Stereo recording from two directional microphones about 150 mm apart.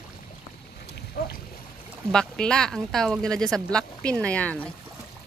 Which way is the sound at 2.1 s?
5° left (ahead or behind).